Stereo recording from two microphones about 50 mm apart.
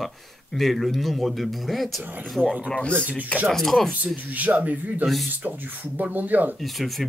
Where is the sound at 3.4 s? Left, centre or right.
Centre.